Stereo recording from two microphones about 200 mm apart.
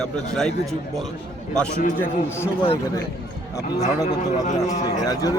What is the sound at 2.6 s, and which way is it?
Speech, 25° left (ahead or behind).